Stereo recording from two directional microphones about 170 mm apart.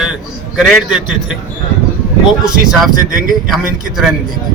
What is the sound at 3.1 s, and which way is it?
Speech, 55° right (ahead or behind).